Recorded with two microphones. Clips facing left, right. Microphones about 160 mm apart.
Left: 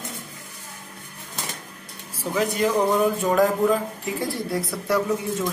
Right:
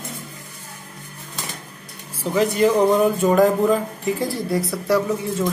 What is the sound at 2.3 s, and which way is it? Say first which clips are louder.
Speech: right 5 dB; centre (ahead or behind).